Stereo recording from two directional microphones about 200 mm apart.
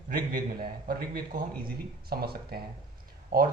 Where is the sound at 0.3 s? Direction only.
45° right (ahead or behind).